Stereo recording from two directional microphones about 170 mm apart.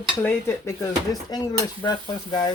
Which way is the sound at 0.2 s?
15° left (ahead or behind).